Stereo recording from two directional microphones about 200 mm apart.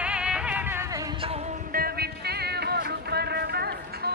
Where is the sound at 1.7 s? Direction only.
50° right (ahead or behind).